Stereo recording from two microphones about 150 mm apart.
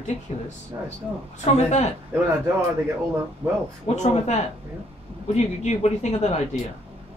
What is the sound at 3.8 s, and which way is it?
Speech, 50° left (ahead or behind).